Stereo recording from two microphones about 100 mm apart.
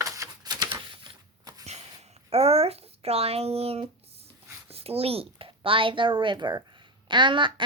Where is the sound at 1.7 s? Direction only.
90° right.